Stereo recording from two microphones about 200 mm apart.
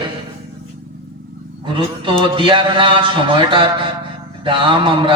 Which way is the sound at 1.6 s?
25° right (ahead or behind).